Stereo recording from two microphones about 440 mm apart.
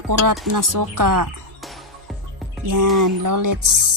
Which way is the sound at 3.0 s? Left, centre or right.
Right.